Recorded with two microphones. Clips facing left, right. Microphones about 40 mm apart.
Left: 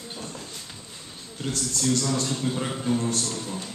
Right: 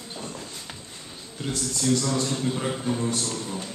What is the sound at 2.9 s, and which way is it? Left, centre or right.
Speech, right.